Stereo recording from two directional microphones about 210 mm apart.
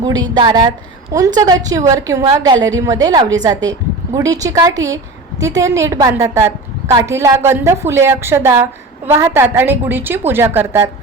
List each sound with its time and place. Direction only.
0.0 s a woman's voice: 20° right (ahead or behind)